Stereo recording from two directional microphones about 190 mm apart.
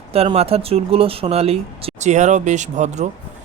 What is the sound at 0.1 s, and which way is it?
Speech, 30° right (ahead or behind).